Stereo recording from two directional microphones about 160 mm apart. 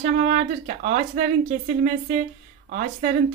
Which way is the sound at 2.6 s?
50° right (ahead or behind).